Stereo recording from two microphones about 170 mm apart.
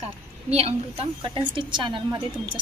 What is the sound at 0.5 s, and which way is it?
A woman's voice, 35° right (ahead or behind).